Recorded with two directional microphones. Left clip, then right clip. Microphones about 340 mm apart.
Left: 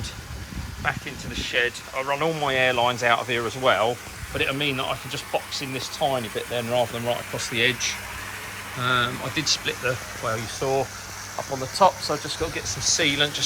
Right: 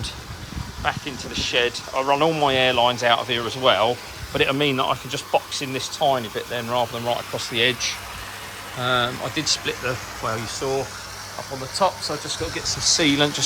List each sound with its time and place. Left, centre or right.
0.9 s speech: centre
12.7 s speech: centre